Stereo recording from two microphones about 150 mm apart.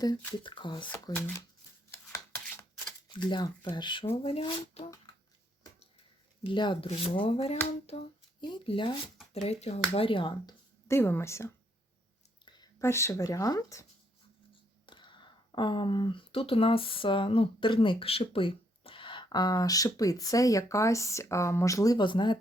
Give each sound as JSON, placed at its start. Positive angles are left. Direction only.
{"t": 0.3, "sound": "speech", "side_deg": 30}
{"t": 1.9, "sound": "a sound", "side_deg": 15}
{"t": 3.1, "sound": "speech", "side_deg": 30}
{"t": 6.4, "sound": "speech", "side_deg": 30}
{"t": 8.4, "sound": "speech", "side_deg": 30}
{"t": 9.3, "sound": "speech", "side_deg": 45}
{"t": 10.8, "sound": "a woman's voice", "side_deg": 15}
{"t": 12.8, "sound": "speech", "side_deg": 20}
{"t": 14.8, "sound": "speech", "side_deg": 30}